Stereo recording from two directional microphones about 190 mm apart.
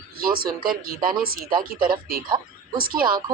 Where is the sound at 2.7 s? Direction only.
50° right (ahead or behind).